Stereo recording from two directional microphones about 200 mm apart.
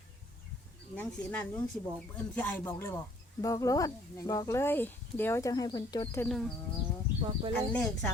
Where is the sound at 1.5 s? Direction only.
10° left (ahead or behind).